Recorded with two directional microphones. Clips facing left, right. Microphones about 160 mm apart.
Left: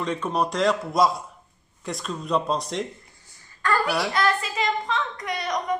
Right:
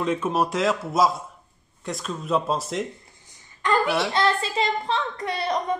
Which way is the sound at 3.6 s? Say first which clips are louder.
Right 2 dB; 20° right (ahead or behind).